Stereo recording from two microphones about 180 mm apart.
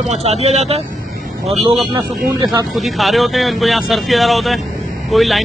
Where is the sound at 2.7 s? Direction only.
Centre (ahead or behind).